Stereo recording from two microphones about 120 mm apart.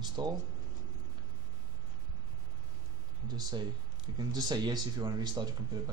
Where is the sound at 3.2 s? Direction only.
35° right (ahead or behind).